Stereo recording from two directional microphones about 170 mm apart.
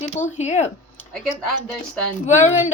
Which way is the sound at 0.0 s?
45° left (ahead or behind).